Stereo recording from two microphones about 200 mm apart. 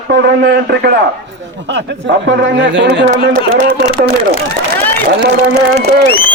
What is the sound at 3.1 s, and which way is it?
Speech, 50° right (ahead or behind).